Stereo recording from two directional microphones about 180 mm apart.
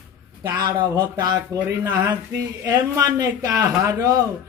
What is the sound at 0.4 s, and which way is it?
Speech, 20° right (ahead or behind).